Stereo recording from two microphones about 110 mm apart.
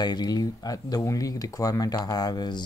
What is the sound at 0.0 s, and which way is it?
Speech, 40° left (ahead or behind).